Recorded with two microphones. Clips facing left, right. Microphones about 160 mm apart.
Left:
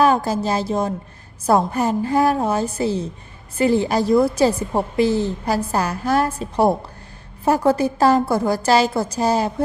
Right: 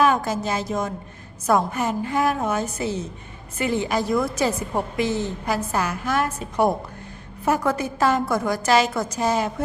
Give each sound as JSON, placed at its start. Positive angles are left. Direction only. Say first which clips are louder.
{"t": 0.0, "sound": "a woman's voice", "louder": "left 3 dB", "side_deg": 35}